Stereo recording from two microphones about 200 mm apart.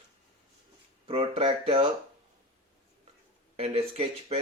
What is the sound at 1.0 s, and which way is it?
Speech, 25° right (ahead or behind).